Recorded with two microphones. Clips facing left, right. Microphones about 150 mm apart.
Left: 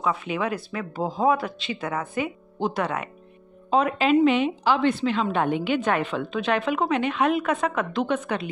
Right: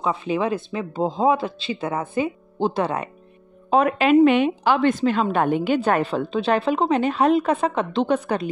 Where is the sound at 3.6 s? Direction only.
55° right (ahead or behind).